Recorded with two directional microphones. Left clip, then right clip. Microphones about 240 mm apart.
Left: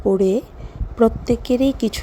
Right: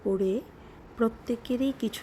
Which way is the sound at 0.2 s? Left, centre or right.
Centre.